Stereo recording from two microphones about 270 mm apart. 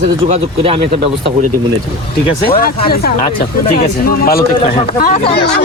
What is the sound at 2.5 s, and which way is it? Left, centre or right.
Speech, left.